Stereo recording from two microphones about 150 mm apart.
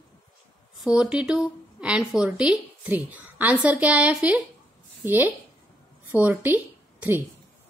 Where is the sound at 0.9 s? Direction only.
5° right (ahead or behind).